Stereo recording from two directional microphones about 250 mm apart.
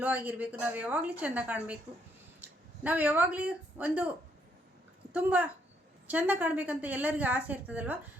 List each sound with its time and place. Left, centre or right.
0.0 s a woman's voice: centre
5.1 s a woman's voice: centre